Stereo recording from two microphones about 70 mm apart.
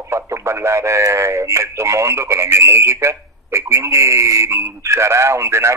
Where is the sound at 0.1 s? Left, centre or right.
Right.